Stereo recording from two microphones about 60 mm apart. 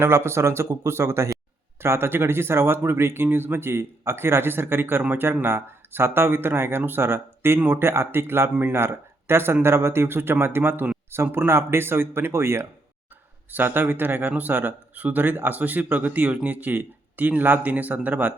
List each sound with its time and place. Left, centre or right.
0.0 s speech: right
13.5 s speech: right